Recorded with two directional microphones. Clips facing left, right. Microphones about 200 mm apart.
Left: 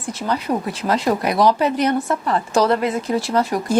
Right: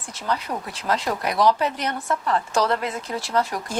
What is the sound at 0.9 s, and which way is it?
A woman's voice, 10° left (ahead or behind).